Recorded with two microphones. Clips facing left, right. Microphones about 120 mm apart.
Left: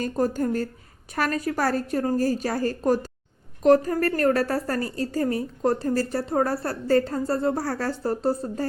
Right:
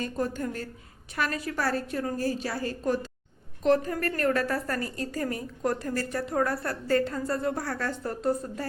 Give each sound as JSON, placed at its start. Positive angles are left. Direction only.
{"t": 0.0, "sound": "a woman's voice", "side_deg": 40}